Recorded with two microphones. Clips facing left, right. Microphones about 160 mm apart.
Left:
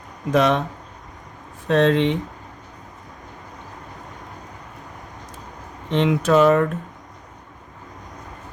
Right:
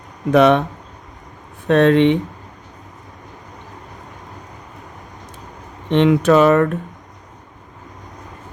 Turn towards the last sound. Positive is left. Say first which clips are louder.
# right 3 dB
turn(degrees=-65)  # may be behind; listen again after turning